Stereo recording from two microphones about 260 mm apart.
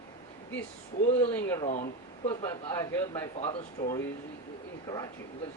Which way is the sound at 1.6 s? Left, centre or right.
Left.